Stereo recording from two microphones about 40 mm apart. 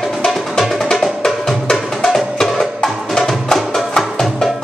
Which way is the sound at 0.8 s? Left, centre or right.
Centre.